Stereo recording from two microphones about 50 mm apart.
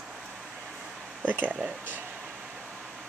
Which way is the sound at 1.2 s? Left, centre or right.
Right.